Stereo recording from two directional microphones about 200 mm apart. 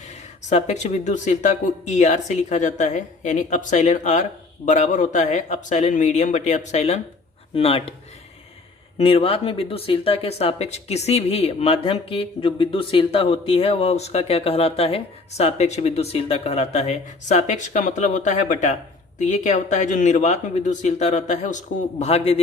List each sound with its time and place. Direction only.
0.1 s speech: 35° left (ahead or behind)
9.0 s speech: 30° left (ahead or behind)